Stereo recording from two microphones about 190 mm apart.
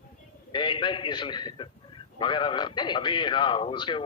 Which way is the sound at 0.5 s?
25° left (ahead or behind).